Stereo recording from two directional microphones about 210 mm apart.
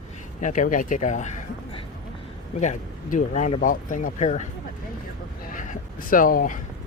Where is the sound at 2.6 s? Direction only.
35° left (ahead or behind).